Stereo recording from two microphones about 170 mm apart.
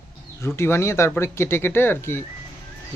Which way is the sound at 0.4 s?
15° left (ahead or behind).